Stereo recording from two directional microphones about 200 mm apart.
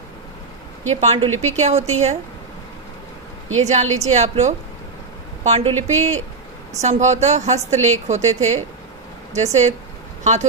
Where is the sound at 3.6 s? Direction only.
35° right (ahead or behind).